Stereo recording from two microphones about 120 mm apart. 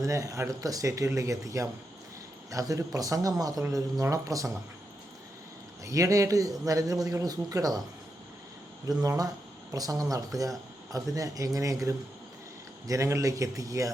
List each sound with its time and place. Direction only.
0.0 s speech: 25° right (ahead or behind)
5.8 s speech: 30° right (ahead or behind)
9.0 s speech: 30° right (ahead or behind)